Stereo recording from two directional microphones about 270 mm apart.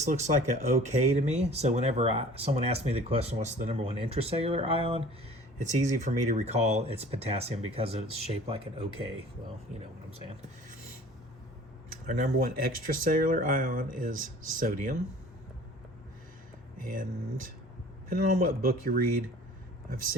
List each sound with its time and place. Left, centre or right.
0.0 s speech: right
12.0 s speech: right
16.7 s speech: right